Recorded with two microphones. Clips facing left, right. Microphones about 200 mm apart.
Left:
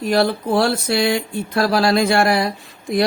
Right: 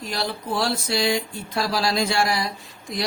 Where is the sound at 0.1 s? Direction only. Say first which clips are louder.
Left 11 dB; 55° left (ahead or behind).